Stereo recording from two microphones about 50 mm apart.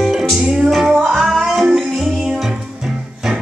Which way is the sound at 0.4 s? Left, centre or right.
Centre.